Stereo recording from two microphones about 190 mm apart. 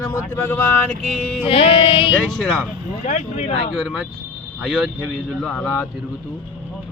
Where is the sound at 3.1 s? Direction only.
35° left (ahead or behind).